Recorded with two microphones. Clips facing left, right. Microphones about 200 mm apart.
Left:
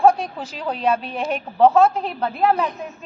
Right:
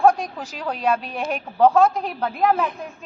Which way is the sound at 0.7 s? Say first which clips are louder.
Left 1 dB; 35° left (ahead or behind).